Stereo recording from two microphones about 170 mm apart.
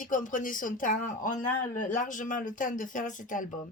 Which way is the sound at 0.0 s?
50° left (ahead or behind).